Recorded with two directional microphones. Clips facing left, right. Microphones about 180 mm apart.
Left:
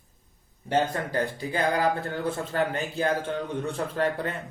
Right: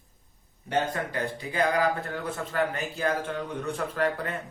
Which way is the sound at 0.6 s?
35° left (ahead or behind).